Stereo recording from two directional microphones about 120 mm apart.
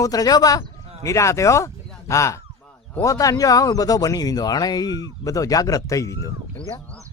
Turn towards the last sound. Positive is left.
turn(degrees=25)  # may be behind; listen again after turning